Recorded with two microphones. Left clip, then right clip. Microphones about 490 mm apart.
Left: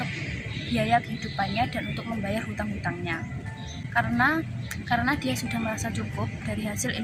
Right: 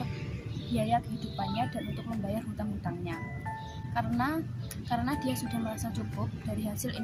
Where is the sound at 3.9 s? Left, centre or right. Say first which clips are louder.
Left 8 dB; right.